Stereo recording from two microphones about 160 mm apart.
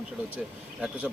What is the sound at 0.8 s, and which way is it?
Speech, 5° right (ahead or behind).